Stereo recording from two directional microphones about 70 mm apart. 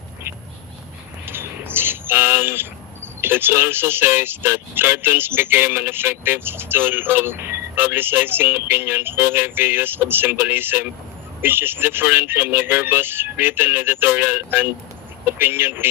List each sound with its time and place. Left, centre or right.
1.2 s bird: right